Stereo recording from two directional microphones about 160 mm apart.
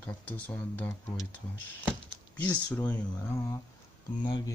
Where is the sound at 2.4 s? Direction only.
10° left (ahead or behind).